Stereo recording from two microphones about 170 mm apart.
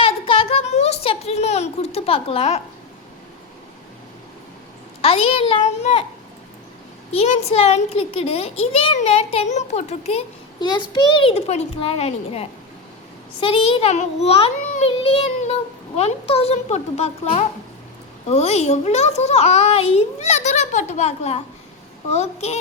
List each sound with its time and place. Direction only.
0.0 s a sound: 30° left (ahead or behind)
5.0 s a child's voice: 35° left (ahead or behind)
7.1 s a child's voice: 40° left (ahead or behind)